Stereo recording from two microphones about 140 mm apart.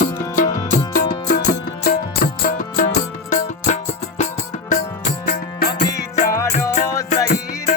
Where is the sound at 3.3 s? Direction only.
60° left (ahead or behind).